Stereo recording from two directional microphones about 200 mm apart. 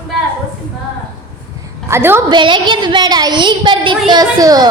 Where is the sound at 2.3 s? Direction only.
20° right (ahead or behind).